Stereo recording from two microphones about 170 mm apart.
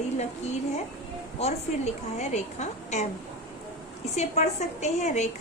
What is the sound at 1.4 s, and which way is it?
A woman's voice, 40° left (ahead or behind).